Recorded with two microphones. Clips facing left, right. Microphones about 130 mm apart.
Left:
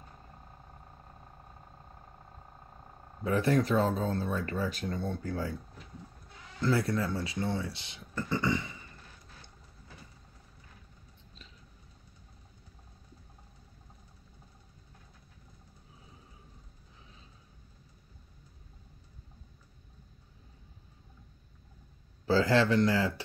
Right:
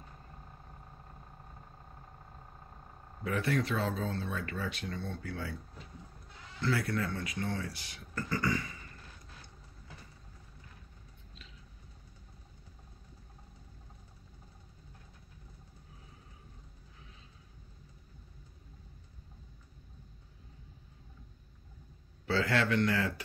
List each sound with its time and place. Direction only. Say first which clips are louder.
3.3 s speech: left 5 dB; 35° left (ahead or behind)
6.6 s speech: left 4 dB; 35° left (ahead or behind)
22.2 s speech: left 5 dB; 35° left (ahead or behind)